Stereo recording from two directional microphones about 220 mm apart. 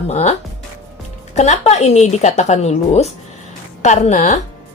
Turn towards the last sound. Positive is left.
turn(degrees=30)  # may be behind; listen again after turning